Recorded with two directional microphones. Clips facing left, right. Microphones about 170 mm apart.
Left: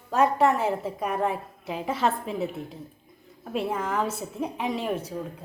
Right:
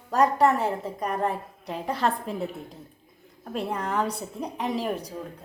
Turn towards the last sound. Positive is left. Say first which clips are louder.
# even
turn(degrees=0)  # may be behind; listen again after turning